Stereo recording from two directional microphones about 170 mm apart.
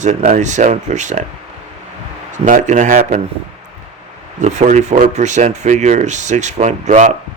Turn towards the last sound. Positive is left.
turn(degrees=-45)  # may be behind; listen again after turning